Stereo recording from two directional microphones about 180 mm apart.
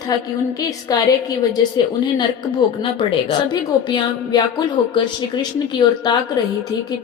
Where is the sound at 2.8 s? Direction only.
25° left (ahead or behind).